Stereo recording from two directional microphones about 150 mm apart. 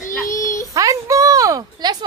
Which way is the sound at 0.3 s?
20° left (ahead or behind).